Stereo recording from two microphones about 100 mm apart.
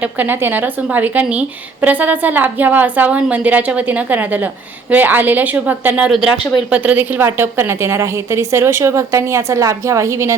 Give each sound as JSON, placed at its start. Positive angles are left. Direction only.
{"t": 0.0, "sound": "a woman's voice", "side_deg": -20}
{"t": 6.1, "sound": "a woman's voice", "side_deg": -5}